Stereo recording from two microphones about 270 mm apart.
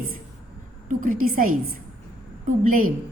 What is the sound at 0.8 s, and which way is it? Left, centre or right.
A woman's voice, right.